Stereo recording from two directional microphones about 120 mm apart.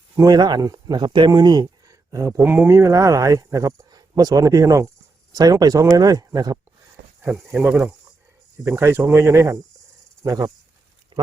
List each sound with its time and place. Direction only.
0.2 s speech: 35° right (ahead or behind)
2.4 s speech: 15° right (ahead or behind); by 6.6 s 30° right (ahead or behind)
7.3 s speech: centre (ahead or behind)
8.6 s speech: 20° right (ahead or behind)
11.1 s a sound: 45° right (ahead or behind)